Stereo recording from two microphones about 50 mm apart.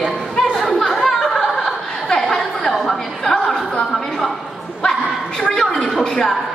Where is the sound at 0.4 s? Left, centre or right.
Centre.